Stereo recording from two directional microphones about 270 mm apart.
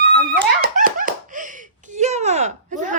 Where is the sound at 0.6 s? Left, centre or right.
Right.